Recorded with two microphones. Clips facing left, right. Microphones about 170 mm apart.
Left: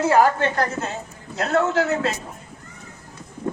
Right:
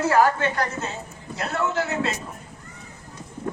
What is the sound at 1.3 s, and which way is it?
Speech, 75° left (ahead or behind).